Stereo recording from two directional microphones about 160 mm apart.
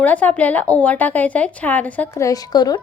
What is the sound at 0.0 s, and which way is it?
A woman's voice, 10° left (ahead or behind).